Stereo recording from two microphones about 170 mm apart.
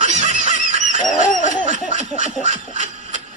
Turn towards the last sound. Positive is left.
turn(degrees=-45)  # may be behind; listen again after turning